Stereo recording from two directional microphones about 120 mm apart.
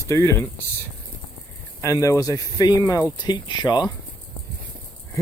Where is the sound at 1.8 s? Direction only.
25° left (ahead or behind).